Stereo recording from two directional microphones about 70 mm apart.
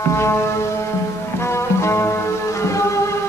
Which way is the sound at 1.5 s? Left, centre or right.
Left.